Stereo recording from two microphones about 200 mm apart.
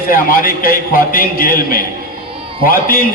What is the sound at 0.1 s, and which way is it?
A man's voice, 45° left (ahead or behind).